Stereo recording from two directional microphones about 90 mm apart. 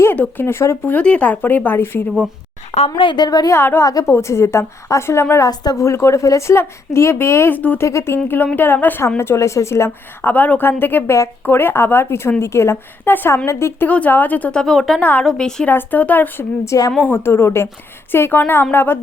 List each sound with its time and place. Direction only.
0.0 s a woman's voice: 20° left (ahead or behind)
0.9 s speech: 15° left (ahead or behind)
3.0 s a woman's voice: 65° left (ahead or behind)
3.2 s speech: 45° left (ahead or behind)
3.5 s a woman's voice: 25° left (ahead or behind)
7.9 s a woman's voice: 30° left (ahead or behind)
14.6 s speech: centre (ahead or behind)
15.7 s a woman's voice: 20° left (ahead or behind)
16.6 s speech: 40° left (ahead or behind)
17.0 s a woman's voice: 25° left (ahead or behind)